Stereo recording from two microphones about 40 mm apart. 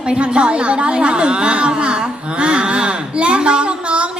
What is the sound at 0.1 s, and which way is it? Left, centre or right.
A woman's voice, right.